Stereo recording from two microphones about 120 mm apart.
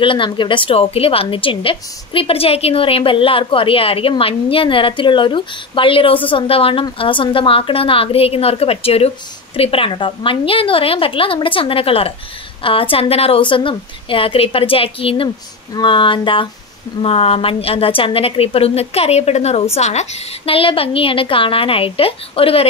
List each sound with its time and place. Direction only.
0.0 s a woman's voice: 45° left (ahead or behind)